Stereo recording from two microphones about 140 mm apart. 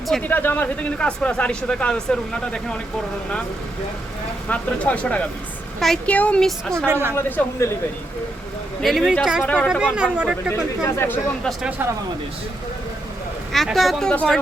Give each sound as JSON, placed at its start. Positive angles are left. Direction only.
{"t": 0.1, "sound": "speech", "side_deg": 10}
{"t": 4.4, "sound": "speech", "side_deg": 10}
{"t": 6.7, "sound": "speech", "side_deg": -15}
{"t": 7.2, "sound": "speech", "side_deg": 15}
{"t": 8.8, "sound": "speech", "side_deg": 0}
{"t": 9.4, "sound": "speech", "side_deg": 10}
{"t": 9.8, "sound": "speech", "side_deg": -10}
{"t": 10.5, "sound": "speech", "side_deg": 20}
{"t": 13.5, "sound": "speech", "side_deg": 0}